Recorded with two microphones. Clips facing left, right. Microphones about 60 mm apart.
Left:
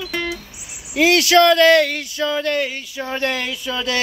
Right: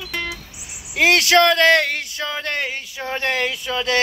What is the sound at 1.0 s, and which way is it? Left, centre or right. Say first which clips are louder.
Speech: left 1 dB; right.